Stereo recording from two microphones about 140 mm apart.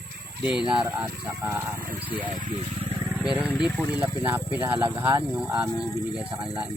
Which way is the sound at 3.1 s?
5° right (ahead or behind).